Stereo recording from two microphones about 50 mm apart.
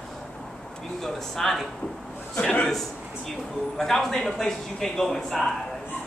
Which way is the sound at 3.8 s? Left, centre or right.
Centre.